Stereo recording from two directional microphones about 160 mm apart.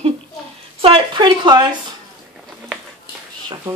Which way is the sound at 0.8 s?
35° right (ahead or behind).